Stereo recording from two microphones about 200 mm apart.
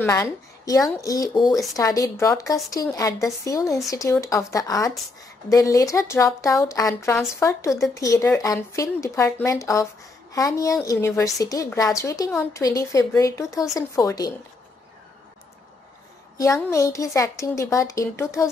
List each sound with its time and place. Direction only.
0.0 s a woman's voice: 15° left (ahead or behind)
16.3 s a woman's voice: 15° left (ahead or behind)